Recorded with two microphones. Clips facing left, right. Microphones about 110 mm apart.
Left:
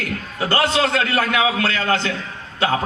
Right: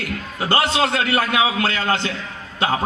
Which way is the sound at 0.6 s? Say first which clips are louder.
Left 1 dB; 40° left (ahead or behind).